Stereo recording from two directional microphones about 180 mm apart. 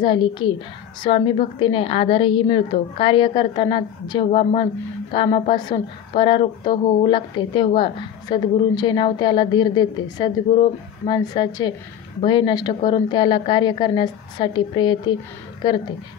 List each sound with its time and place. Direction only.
0.0 s speech: 25° left (ahead or behind)